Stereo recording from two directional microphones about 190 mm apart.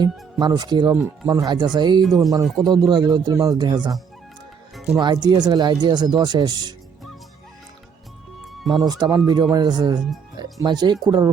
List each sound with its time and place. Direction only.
0.0 s speech: 20° right (ahead or behind)
2.0 s speech: centre (ahead or behind)
2.7 s speech: 20° right (ahead or behind)
4.7 s music: centre (ahead or behind)
4.9 s speech: 20° right (ahead or behind)
8.4 s music: centre (ahead or behind)
8.9 s speech: 20° right (ahead or behind)